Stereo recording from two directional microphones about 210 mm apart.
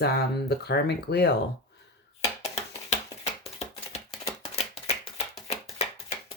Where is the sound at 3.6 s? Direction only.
30° left (ahead or behind).